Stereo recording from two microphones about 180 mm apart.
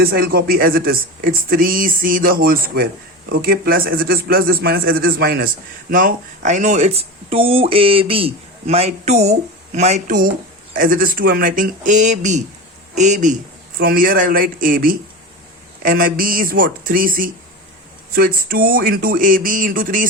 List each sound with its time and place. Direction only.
0.0 s speech: 55° right (ahead or behind)
5.9 s a man's voice: 50° right (ahead or behind)
13.7 s speech: 55° right (ahead or behind)